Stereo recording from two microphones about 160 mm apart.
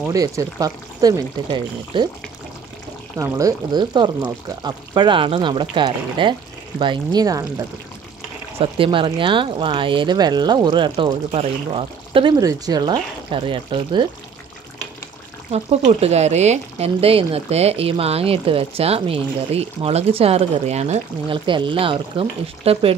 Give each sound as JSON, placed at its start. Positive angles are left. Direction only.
{"t": 0.1, "sound": "speech", "side_deg": -20}
{"t": 3.2, "sound": "speech", "side_deg": -20}
{"t": 8.5, "sound": "speech", "side_deg": -35}
{"t": 15.5, "sound": "speech", "side_deg": -40}